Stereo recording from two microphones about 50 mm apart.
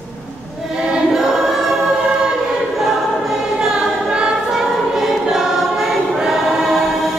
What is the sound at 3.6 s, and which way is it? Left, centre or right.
Choir, centre.